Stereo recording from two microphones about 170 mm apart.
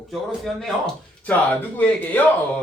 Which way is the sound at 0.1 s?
Centre (ahead or behind).